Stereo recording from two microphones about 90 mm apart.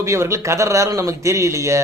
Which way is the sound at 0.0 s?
35° right (ahead or behind).